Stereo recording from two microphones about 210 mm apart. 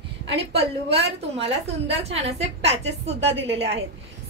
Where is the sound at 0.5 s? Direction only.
25° right (ahead or behind).